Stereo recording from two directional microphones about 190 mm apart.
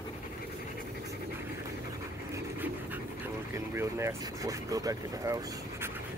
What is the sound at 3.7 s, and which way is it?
Speech, 15° right (ahead or behind).